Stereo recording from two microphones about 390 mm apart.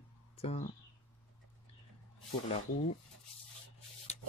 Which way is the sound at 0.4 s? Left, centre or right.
Centre.